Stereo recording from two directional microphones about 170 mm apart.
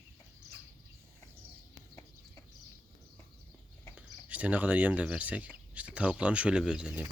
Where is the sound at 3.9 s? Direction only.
10° right (ahead or behind).